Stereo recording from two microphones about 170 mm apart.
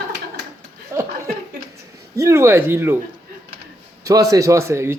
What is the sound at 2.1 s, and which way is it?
Speech, 15° right (ahead or behind).